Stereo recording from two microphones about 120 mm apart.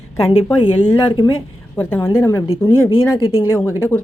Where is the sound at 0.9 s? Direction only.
35° left (ahead or behind).